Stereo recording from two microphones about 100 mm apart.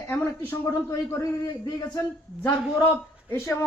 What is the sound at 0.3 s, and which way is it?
A man's voice, 30° left (ahead or behind).